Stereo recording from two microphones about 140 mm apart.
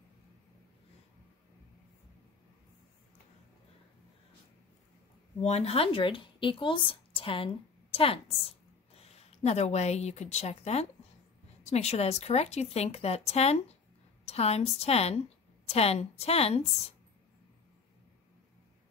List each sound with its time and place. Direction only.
5.4 s a woman's voice: 50° left (ahead or behind)